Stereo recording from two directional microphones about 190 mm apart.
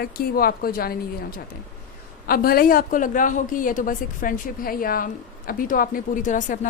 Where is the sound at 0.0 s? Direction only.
50° left (ahead or behind).